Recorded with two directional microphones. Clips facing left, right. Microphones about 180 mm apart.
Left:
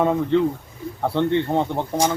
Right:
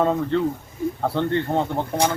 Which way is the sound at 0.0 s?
10° left (ahead or behind).